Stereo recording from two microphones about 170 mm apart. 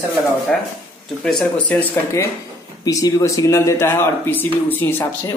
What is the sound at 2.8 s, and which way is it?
Speech, 20° left (ahead or behind).